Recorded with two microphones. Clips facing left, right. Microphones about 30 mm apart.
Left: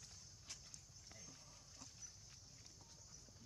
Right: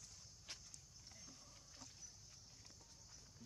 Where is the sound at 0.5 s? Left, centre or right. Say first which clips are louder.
Right 2 dB; right.